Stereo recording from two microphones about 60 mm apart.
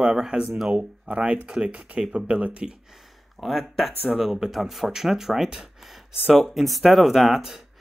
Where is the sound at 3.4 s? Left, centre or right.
Centre.